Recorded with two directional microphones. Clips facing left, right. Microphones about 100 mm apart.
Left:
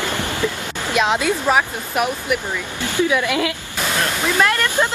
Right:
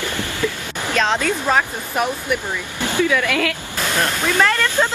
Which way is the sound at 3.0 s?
20° left (ahead or behind).